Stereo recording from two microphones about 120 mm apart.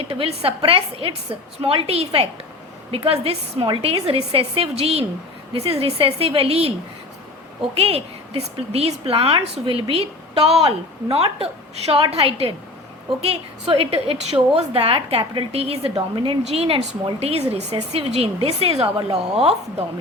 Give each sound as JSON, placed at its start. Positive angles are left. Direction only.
{"t": 0.0, "sound": "a woman's voice", "side_deg": -50}
{"t": 7.8, "sound": "a woman's voice", "side_deg": -55}
{"t": 16.0, "sound": "a woman's voice", "side_deg": -45}
{"t": 16.5, "sound": "speech", "side_deg": -55}